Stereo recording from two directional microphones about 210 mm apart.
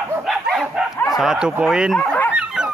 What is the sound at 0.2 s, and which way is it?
Dog, centre (ahead or behind).